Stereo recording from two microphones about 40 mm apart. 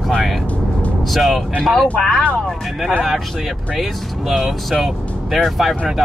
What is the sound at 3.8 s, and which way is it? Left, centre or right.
Speech, centre.